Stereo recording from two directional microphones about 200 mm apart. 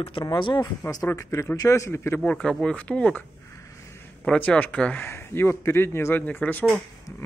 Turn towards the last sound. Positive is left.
turn(degrees=5)  # may be behind; listen again after turning